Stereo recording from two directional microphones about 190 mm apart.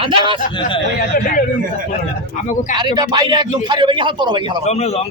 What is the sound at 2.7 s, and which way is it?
A man's voice, 25° right (ahead or behind).